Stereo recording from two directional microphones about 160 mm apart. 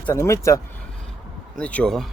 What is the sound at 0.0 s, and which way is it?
Speech, 15° left (ahead or behind).